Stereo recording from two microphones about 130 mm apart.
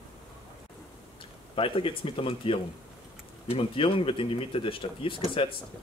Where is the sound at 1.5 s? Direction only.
45° left (ahead or behind).